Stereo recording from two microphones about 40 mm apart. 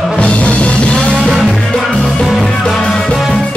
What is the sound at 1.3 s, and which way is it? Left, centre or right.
Music, centre.